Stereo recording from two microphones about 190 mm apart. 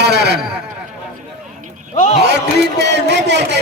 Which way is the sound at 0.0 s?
60° right (ahead or behind).